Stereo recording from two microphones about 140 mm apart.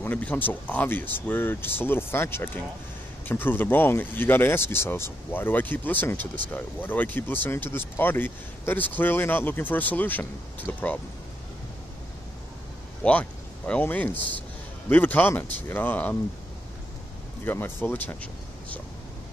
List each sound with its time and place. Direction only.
0.0 s speech: 10° left (ahead or behind)
13.0 s speech: 10° left (ahead or behind)
17.5 s speech: 15° left (ahead or behind)